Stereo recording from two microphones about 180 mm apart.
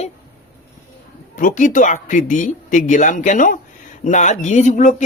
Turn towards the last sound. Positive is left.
turn(degrees=40)  # may be behind; listen again after turning